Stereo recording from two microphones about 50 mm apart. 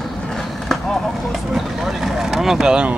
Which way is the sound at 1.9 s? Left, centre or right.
Centre.